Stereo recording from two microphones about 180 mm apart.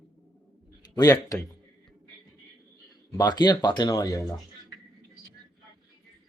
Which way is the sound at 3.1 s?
20° left (ahead or behind).